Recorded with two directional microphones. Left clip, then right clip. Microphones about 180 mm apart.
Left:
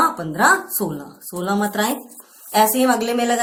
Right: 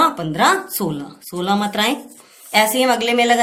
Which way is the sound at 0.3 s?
45° right (ahead or behind).